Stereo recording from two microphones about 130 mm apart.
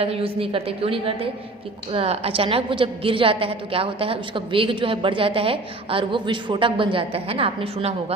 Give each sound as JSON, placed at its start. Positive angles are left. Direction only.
{"t": 0.0, "sound": "a woman's voice", "side_deg": -45}